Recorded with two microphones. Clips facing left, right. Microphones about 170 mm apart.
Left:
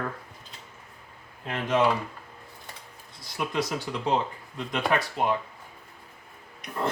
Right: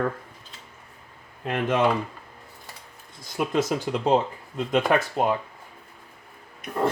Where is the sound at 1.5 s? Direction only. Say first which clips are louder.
Right 2 dB; 55° right (ahead or behind).